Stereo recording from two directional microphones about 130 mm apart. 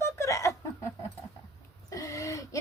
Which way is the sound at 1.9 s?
25° left (ahead or behind).